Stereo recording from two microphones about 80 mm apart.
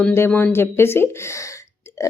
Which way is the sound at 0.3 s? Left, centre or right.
Left.